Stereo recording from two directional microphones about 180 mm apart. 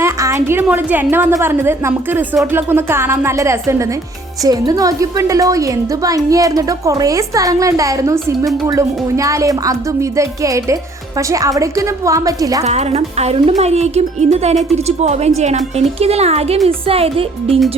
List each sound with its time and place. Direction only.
0.0 s a woman's voice: 15° right (ahead or behind)
12.6 s speech: 35° right (ahead or behind)